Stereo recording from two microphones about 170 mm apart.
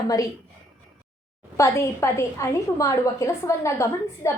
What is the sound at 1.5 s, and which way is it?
A woman's voice, 15° left (ahead or behind).